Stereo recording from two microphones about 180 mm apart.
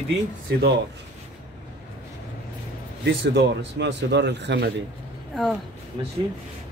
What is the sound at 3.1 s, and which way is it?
A man's voice, 80° right.